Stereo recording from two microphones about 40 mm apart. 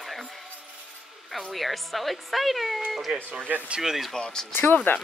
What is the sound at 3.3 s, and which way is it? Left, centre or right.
Speech, right.